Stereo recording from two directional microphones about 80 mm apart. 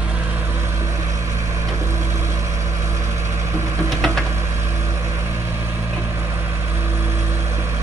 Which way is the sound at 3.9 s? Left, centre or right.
Centre.